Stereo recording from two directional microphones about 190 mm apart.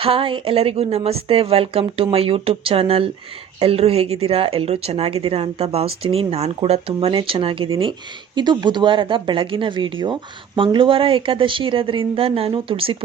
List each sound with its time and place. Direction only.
0.0 s speech: 30° right (ahead or behind)